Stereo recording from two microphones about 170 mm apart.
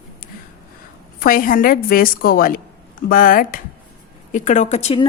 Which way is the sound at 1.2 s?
55° left (ahead or behind).